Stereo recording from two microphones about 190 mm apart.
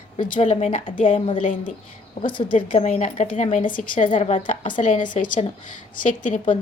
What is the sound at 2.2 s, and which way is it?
Speech, 25° left (ahead or behind).